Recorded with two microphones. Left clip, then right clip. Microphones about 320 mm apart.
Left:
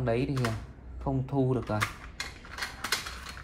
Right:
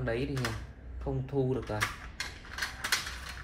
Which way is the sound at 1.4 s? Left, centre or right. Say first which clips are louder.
Left 2 dB; left.